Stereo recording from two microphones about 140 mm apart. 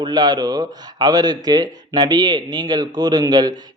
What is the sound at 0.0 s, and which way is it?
A man's voice, 30° right (ahead or behind).